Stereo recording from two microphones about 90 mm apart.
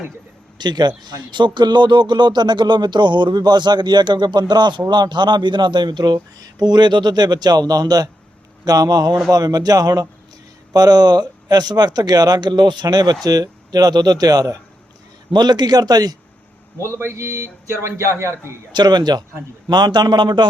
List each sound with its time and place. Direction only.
0.6 s speech: 55° right (ahead or behind)
16.7 s a man's voice: 35° right (ahead or behind)
18.7 s speech: 50° right (ahead or behind)